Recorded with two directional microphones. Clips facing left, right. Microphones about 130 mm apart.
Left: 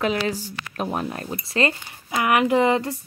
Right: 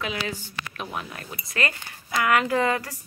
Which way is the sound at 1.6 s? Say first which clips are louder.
Left 6 dB; 25° left (ahead or behind).